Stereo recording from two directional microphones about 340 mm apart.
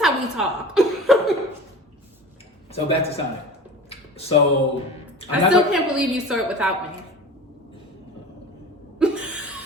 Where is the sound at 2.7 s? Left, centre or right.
Centre.